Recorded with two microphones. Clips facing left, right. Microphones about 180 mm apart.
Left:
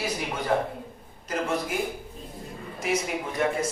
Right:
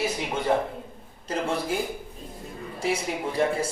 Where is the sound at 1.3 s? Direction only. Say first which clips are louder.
Right 1 dB; 30° right (ahead or behind).